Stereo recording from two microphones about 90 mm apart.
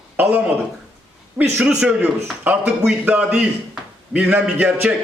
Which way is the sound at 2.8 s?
10° right (ahead or behind).